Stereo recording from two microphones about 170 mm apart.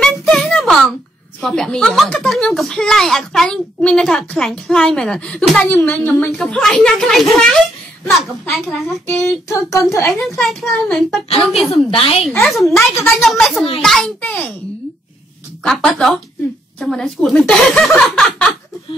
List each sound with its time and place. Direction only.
0.0 s a sound: 5° left (ahead or behind)
1.4 s a woman's voice: 5° left (ahead or behind)
9.1 s speech: 15° left (ahead or behind)
10.1 s a woman's voice: centre (ahead or behind)
11.2 s a woman's voice: 35° left (ahead or behind)
12.3 s a woman's voice: 5° left (ahead or behind)
12.7 s speech: 15° left (ahead or behind)
13.2 s a woman's voice: centre (ahead or behind)
15.6 s a woman's voice: 5° left (ahead or behind)